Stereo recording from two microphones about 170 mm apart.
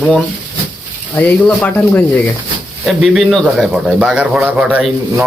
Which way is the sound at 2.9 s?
Centre (ahead or behind).